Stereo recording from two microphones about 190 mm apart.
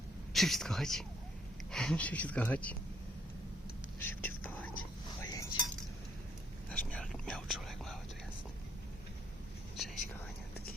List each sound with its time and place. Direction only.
0.3 s speech: centre (ahead or behind)
4.0 s whispering: 10° left (ahead or behind)
5.2 s chink: 15° left (ahead or behind)
6.7 s whispering: 5° left (ahead or behind)